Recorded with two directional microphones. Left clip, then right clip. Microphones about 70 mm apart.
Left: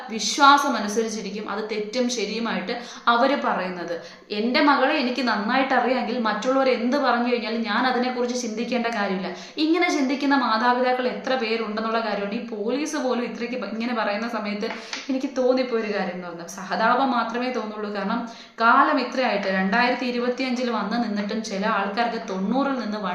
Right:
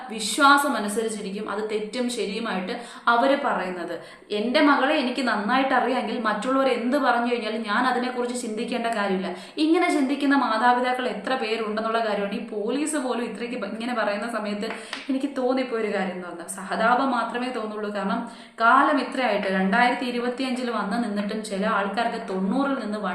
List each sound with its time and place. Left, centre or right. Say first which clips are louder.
0.3 s a woman's voice: left 2 dB; left
2.0 s a woman's voice: left 3 dB; left
4.5 s a woman's voice: left 1 dB; left
15.4 s speech: left 3 dB; centre
16.7 s a woman's voice: left 1 dB; left
18.6 s a woman's voice: left 1 dB; centre
22.5 s a woman's voice: left 2 dB; left